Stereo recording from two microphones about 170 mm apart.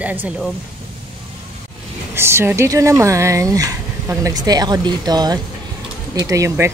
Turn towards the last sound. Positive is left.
turn(degrees=-15)  # may be behind; listen again after turning